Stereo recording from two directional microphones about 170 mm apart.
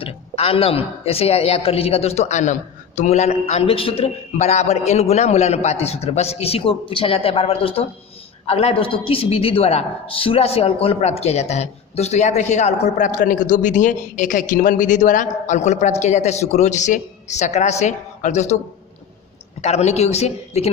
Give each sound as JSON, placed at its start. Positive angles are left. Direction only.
{"t": 0.0, "sound": "a woman's voice", "side_deg": 35}
{"t": 19.6, "sound": "a woman's voice", "side_deg": 40}